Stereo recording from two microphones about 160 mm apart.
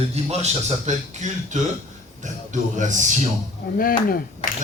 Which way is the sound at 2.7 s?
50° right (ahead or behind).